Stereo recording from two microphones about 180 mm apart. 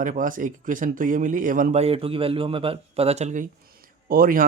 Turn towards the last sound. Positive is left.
turn(degrees=-55)  # may be behind; listen again after turning